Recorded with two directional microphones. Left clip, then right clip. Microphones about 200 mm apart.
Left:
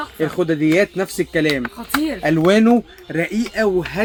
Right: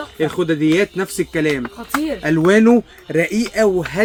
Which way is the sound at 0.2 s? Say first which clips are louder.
Right 1 dB; 20° right (ahead or behind).